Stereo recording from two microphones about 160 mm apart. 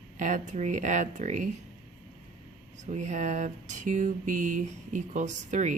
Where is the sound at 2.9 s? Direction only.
45° right (ahead or behind).